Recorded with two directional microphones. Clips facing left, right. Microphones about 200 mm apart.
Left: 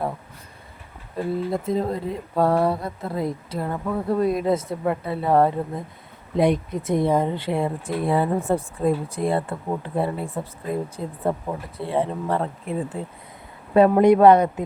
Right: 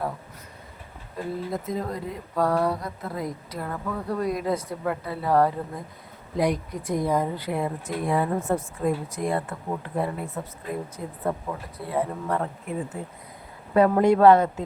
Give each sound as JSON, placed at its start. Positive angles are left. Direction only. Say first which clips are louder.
{"t": 1.5, "sound": "speech", "louder": "left 6 dB", "side_deg": 30}